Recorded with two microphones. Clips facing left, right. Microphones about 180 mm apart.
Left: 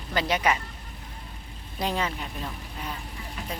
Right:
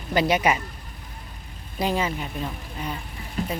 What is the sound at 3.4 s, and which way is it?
Speech, 35° right (ahead or behind).